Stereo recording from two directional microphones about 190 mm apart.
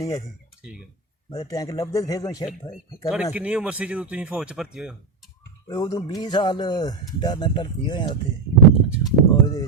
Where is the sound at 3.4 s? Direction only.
5° right (ahead or behind).